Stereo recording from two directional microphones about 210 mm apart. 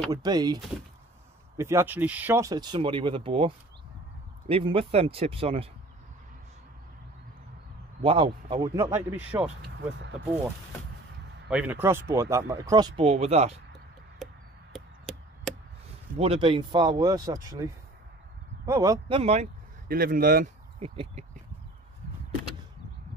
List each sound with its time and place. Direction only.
0.1 s speech: 20° right (ahead or behind)
1.6 s speech: 10° right (ahead or behind)
8.0 s speech: 25° right (ahead or behind)
8.9 s speech: 10° right (ahead or behind)
11.4 s speech: 5° right (ahead or behind); by 13.6 s 30° right (ahead or behind)
14.2 s a sound: centre (ahead or behind)
15.5 s a sound: centre (ahead or behind)
16.2 s speech: 25° right (ahead or behind)
18.7 s speech: 15° right (ahead or behind); by 19.5 s 30° right (ahead or behind)
19.9 s speech: 45° right (ahead or behind)
20.8 s a sound: 30° right (ahead or behind)